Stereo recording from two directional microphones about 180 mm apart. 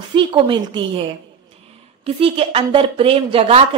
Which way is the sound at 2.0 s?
30° right (ahead or behind).